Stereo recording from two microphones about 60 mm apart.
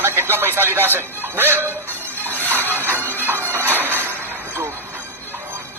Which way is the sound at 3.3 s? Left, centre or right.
Right.